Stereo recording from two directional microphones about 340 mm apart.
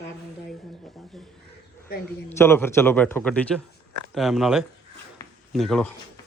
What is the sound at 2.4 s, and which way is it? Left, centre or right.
A man's voice, centre.